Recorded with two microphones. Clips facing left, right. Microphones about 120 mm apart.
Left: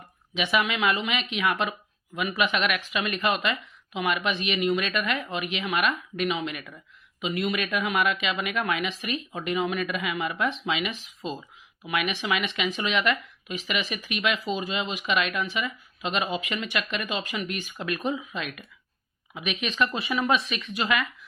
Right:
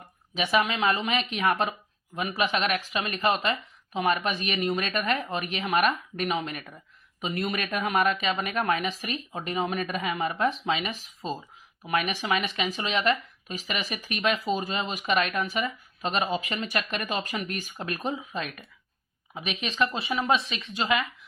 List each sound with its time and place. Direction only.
0.3 s speech: 40° right (ahead or behind)